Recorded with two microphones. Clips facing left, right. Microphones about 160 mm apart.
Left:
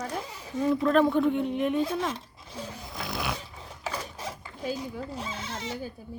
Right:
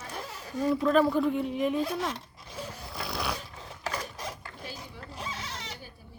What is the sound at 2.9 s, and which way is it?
Snoring, centre (ahead or behind).